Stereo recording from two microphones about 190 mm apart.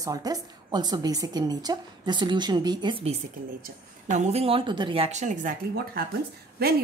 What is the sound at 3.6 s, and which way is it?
Speech, 40° right (ahead or behind).